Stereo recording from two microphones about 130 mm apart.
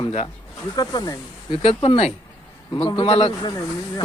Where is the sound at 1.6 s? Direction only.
45° left (ahead or behind).